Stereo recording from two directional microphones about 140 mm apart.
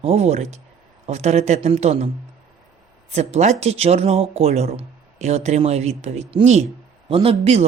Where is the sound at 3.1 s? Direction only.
50° right (ahead or behind).